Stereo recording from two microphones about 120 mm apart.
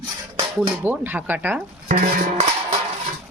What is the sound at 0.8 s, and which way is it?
Speech, 15° right (ahead or behind).